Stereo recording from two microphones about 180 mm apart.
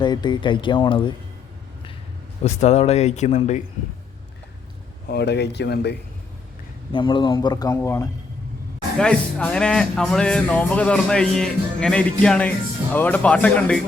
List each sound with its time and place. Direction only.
0.0 s speech: 25° left (ahead or behind)
2.4 s speech: 35° left (ahead or behind)
5.0 s speech: 65° left (ahead or behind)
6.9 s speech: 25° left (ahead or behind)
9.0 s speech: 5° left (ahead or behind)